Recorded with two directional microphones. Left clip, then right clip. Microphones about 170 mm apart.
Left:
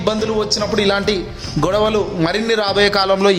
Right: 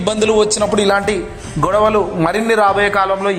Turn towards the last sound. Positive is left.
turn(degrees=45)  # may be behind; listen again after turning